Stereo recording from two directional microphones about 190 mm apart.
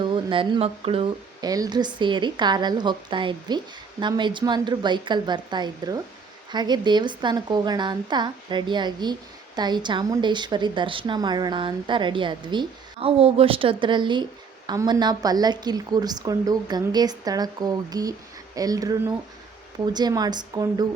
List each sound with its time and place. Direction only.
0.0 s a woman's voice: 25° right (ahead or behind)